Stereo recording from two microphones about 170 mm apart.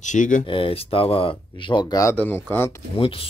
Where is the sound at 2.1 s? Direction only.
10° left (ahead or behind).